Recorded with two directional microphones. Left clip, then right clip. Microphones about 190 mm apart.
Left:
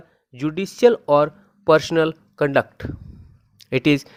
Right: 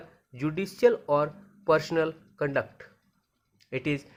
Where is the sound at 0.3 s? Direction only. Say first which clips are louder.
Left 7 dB; 35° left (ahead or behind).